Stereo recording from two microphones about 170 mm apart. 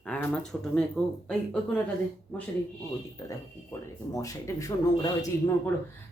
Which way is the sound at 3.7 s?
15° left (ahead or behind).